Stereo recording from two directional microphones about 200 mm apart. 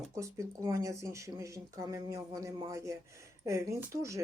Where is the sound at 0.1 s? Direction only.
15° right (ahead or behind).